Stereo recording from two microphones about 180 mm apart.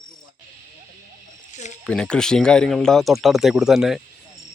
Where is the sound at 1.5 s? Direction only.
40° left (ahead or behind).